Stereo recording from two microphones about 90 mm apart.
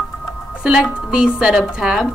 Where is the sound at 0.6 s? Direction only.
5° right (ahead or behind).